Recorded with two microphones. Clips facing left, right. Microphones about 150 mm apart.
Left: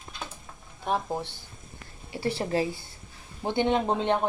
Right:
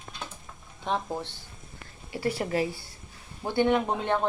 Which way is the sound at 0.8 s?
10° left (ahead or behind).